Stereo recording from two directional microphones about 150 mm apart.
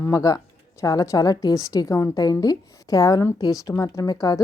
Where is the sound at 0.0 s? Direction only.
20° left (ahead or behind).